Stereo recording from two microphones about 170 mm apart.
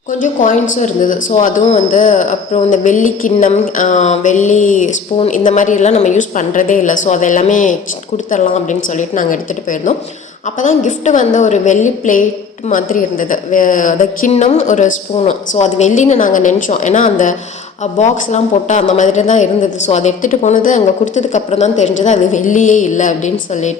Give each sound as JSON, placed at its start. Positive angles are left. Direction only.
{"t": 0.1, "sound": "a woman's voice", "side_deg": 50}